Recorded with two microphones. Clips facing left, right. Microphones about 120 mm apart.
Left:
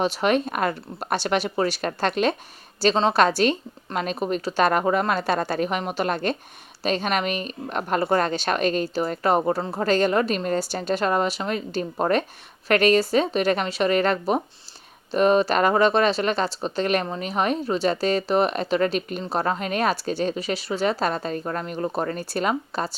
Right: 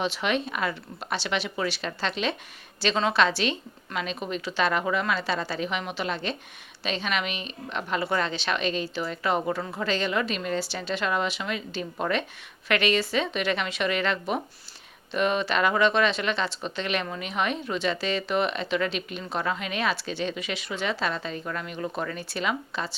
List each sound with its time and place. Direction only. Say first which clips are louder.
0.0 s a woman's voice: left 6 dB; 45° left (ahead or behind)
2.8 s a woman's voice: left 5 dB; 35° left (ahead or behind)